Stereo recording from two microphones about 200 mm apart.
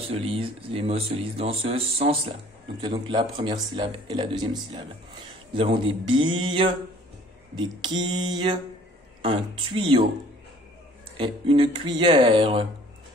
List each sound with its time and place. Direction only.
0.1 s speech: 30° right (ahead or behind)
11.1 s speech: 25° right (ahead or behind)